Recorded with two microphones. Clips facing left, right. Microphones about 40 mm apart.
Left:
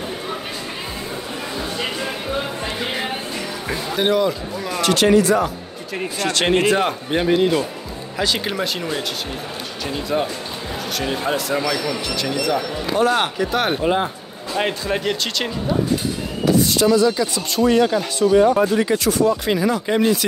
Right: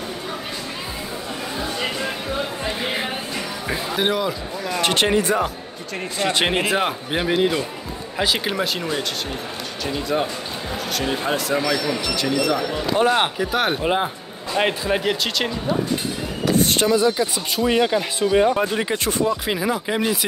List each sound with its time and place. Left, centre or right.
1.6 s a sound: centre
3.6 s speech: centre
4.8 s speech: right; by 15.8 s centre
16.5 s a sound: right
16.8 s speech: centre
19.4 s speech: centre